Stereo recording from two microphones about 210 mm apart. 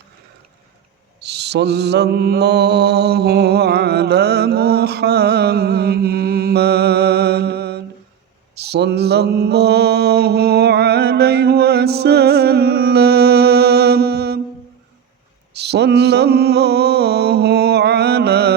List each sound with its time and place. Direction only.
1.2 s mantra: 50° right (ahead or behind)
15.5 s mantra: 50° right (ahead or behind)